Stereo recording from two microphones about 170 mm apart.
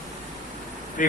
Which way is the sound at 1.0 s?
50° left (ahead or behind).